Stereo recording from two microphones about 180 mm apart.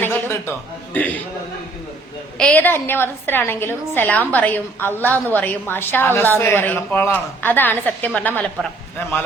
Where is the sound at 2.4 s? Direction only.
5° left (ahead or behind).